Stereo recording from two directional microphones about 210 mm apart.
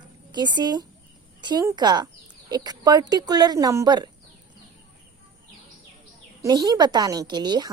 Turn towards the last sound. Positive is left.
turn(degrees=-20)  # may be behind; listen again after turning